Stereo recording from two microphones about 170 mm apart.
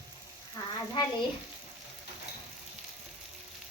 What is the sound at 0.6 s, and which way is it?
Frying, 25° left (ahead or behind).